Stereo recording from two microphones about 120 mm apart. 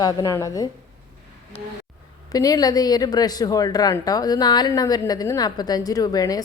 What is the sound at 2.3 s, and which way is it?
A woman's voice, 30° left (ahead or behind).